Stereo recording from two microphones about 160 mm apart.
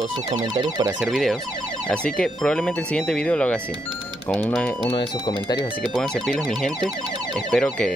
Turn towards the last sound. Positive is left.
turn(degrees=5)  # may be behind; listen again after turning